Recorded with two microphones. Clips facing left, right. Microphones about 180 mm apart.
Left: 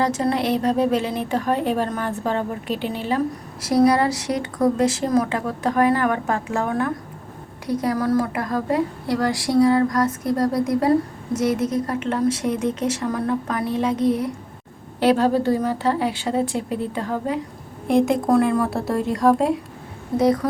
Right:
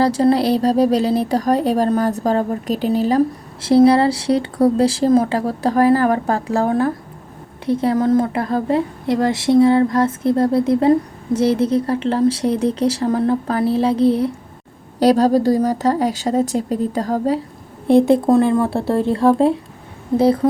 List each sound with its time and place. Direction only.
0.0 s a woman's voice: 30° right (ahead or behind)